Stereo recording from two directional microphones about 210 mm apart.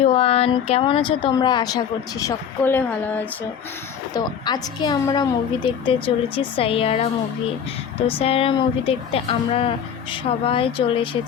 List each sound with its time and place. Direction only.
0.0 s speech: 30° left (ahead or behind)